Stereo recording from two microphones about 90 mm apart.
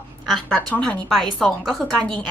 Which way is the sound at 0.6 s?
15° left (ahead or behind).